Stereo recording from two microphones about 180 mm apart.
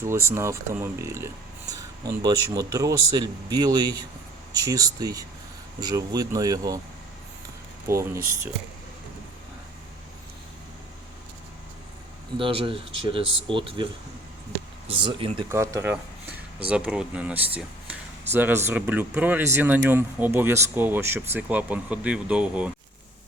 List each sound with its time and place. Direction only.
0.0 s speech: 15° right (ahead or behind)
7.9 s speech: 15° right (ahead or behind)
12.4 s speech: 30° right (ahead or behind)
14.8 s speech: 30° right (ahead or behind)
15.5 s speech: 15° right (ahead or behind)